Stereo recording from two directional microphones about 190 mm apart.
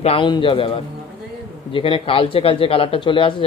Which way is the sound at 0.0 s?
30° left (ahead or behind).